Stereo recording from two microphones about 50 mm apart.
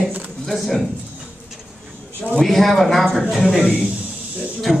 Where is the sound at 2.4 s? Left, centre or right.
Centre.